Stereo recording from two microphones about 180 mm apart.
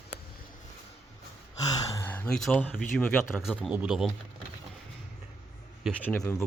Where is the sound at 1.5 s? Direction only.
20° left (ahead or behind).